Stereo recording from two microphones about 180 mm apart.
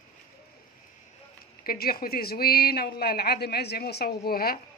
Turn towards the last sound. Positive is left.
turn(degrees=55)  # may be behind; listen again after turning